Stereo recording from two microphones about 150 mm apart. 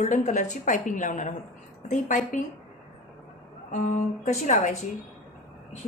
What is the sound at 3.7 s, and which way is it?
A woman's voice, 55° left (ahead or behind).